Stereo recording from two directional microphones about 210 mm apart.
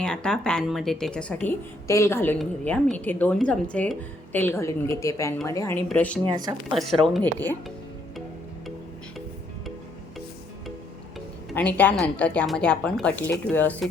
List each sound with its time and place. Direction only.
0.0 s speech: 5° left (ahead or behind)
6.2 s speech: 20° right (ahead or behind)
7.0 s speech: 5° left (ahead or behind)
11.5 s a woman's voice: 5° left (ahead or behind)